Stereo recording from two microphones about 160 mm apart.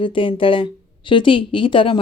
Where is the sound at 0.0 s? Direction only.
30° left (ahead or behind).